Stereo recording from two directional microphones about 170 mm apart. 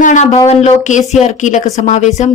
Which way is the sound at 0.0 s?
45° left (ahead or behind).